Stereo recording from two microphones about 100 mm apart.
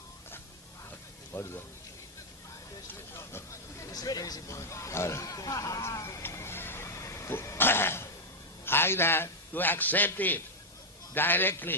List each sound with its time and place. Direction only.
0.9 s music: 25° left (ahead or behind)
3.1 s a sound: 25° left (ahead or behind)
8.6 s a man's voice: 25° left (ahead or behind)